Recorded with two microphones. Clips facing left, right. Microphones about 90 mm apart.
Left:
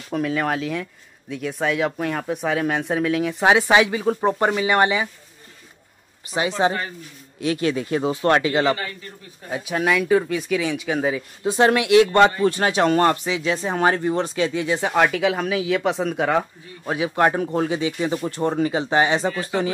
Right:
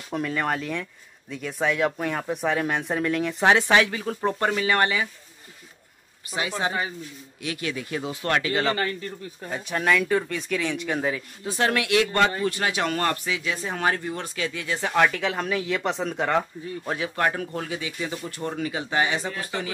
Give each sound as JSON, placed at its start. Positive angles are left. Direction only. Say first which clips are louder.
{"t": 0.1, "sound": "speech", "louder": "left 4 dB", "side_deg": 0}
{"t": 6.6, "sound": "speech", "louder": "left 6 dB", "side_deg": 25}
{"t": 9.5, "sound": "speech", "louder": "left 2 dB", "side_deg": 5}
{"t": 11.4, "sound": "speech", "louder": "left 7 dB", "side_deg": 25}